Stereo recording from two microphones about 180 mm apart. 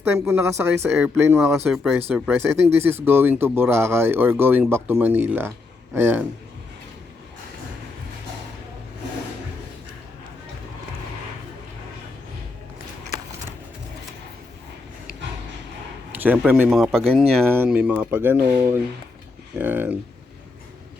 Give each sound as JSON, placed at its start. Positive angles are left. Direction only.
{"t": 0.1, "sound": "speech", "side_deg": -10}
{"t": 1.7, "sound": "speech", "side_deg": 0}
{"t": 16.2, "sound": "speech", "side_deg": -10}
{"t": 17.5, "sound": "speech", "side_deg": -10}